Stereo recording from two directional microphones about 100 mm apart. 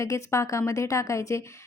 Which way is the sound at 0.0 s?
30° left (ahead or behind).